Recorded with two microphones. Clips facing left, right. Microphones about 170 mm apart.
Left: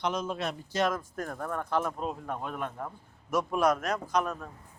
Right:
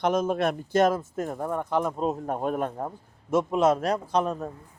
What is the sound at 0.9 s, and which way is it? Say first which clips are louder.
A man's voice: right 6 dB; 25° right (ahead or behind).